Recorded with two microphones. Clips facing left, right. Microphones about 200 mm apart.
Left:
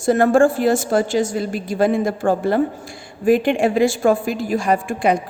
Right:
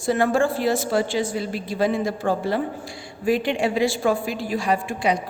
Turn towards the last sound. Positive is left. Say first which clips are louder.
# left 4 dB
turn(degrees=50)  # may be behind; listen again after turning